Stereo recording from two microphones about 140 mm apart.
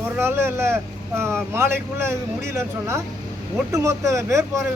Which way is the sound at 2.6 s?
20° right (ahead or behind).